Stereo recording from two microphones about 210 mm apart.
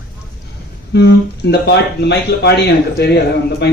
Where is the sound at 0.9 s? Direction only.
55° left (ahead or behind).